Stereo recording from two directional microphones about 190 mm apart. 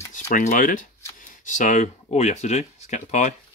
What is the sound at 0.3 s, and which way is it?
Speech, 40° left (ahead or behind).